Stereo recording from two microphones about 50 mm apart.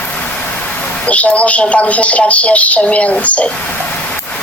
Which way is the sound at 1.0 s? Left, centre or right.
Left.